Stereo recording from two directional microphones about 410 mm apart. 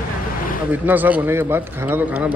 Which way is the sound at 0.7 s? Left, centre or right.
Centre.